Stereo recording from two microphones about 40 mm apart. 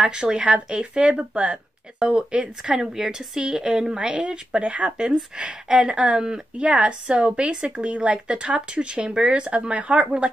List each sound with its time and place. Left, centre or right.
0.0 s speech: right
4.6 s speech: right
6.6 s a woman's voice: right